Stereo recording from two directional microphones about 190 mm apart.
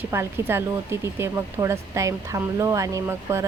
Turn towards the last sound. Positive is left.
turn(degrees=-15)  # may be behind; listen again after turning